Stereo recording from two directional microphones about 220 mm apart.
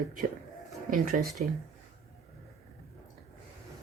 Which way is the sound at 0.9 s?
35° right (ahead or behind).